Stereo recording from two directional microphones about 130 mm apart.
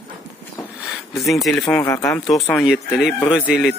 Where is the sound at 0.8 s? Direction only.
Centre (ahead or behind).